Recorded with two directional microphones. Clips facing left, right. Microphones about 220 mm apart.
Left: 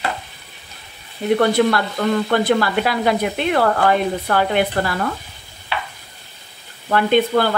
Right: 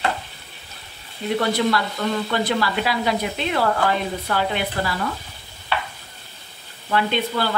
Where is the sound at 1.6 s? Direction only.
55° left (ahead or behind).